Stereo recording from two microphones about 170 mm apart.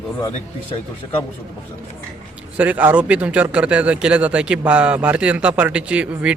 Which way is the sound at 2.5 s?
10° right (ahead or behind).